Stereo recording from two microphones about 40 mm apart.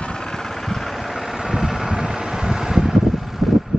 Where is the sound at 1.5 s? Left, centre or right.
Centre.